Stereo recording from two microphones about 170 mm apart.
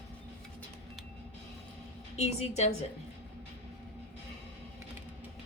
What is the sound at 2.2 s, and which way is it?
Speech, 40° left (ahead or behind).